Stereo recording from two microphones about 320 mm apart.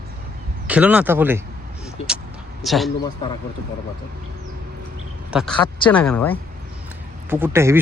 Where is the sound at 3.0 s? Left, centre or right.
Centre.